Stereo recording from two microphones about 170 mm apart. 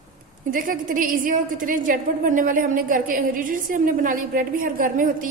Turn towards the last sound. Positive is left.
turn(degrees=-50)  # may be behind; listen again after turning